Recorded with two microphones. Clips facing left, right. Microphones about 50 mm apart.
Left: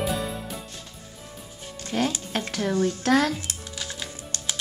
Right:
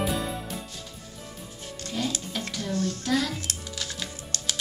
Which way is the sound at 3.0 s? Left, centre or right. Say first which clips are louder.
Left 6 dB; left.